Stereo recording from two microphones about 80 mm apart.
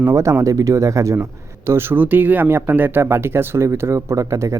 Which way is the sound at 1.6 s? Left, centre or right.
Right.